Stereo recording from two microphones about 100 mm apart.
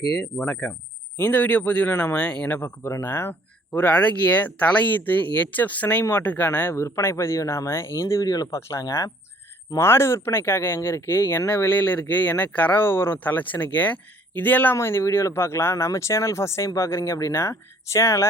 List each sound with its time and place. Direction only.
0.2 s a man's voice: 10° left (ahead or behind); by 18.3 s 30° left (ahead or behind)